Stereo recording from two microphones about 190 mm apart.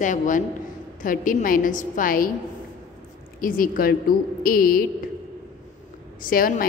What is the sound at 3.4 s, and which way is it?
A woman's voice, 50° left (ahead or behind).